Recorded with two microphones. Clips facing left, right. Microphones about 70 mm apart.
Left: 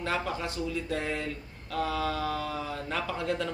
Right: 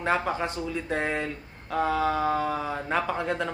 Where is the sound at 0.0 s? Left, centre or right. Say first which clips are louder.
Right 5 dB; right.